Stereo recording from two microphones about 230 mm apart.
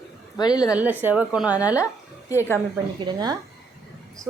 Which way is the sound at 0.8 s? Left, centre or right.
Centre.